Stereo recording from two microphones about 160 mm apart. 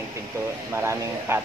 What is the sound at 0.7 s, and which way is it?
Speech, 15° right (ahead or behind).